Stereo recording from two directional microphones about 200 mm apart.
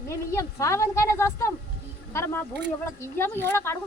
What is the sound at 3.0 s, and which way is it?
Speech, 10° left (ahead or behind).